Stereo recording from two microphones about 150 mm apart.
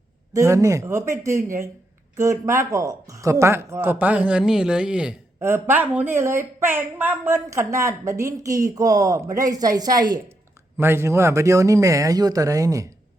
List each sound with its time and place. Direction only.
0.3 s a woman's voice: 20° right (ahead or behind)
5.4 s a woman's voice: 15° right (ahead or behind)
10.8 s a woman's voice: 15° right (ahead or behind)